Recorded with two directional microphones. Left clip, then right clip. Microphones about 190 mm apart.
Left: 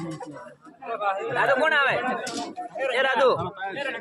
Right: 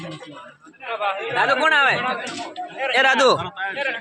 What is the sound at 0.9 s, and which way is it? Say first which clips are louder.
Speech: right 3 dB; 25° left (ahead or behind).